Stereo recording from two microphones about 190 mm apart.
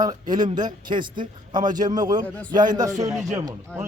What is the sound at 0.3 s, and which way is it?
A man's voice, 20° right (ahead or behind).